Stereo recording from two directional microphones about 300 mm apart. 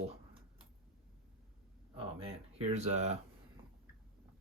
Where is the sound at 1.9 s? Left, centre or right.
Centre.